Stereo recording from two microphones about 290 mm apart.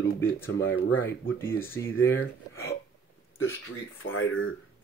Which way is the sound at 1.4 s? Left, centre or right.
Centre.